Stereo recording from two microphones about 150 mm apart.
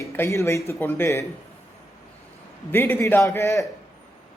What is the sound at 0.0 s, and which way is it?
Speech, 20° left (ahead or behind).